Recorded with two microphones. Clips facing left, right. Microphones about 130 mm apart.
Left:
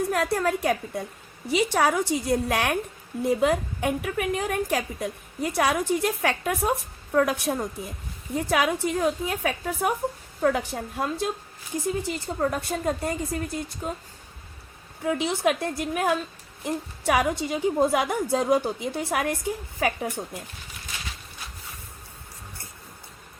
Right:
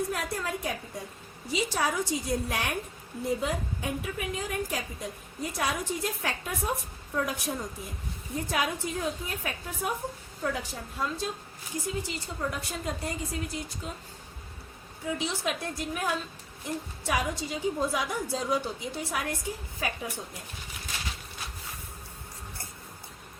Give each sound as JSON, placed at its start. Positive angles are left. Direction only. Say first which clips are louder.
{"t": 0.1, "sound": "a woman's voice", "louder": "left 8 dB", "side_deg": 65}
{"t": 8.4, "sound": "a woman's voice", "louder": "left 7 dB", "side_deg": 80}
{"t": 10.4, "sound": "a woman's voice", "louder": "left 9 dB", "side_deg": 60}
{"t": 15.0, "sound": "a woman's voice", "louder": "left 8 dB", "side_deg": 60}